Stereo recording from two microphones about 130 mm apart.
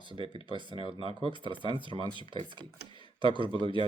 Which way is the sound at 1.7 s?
40° left (ahead or behind).